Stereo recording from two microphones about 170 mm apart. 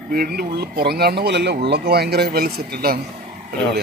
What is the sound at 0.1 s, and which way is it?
Speech, 65° right (ahead or behind).